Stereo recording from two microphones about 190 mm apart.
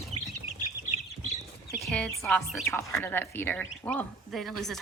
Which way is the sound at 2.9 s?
10° left (ahead or behind).